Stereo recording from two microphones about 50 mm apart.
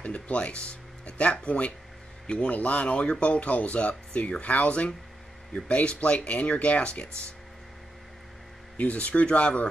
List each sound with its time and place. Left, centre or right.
0.0 s speech: left
8.7 s speech: left